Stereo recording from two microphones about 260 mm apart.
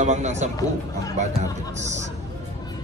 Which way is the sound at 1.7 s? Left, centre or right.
Right.